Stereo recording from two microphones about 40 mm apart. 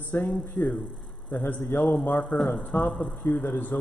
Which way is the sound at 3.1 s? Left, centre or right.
Left.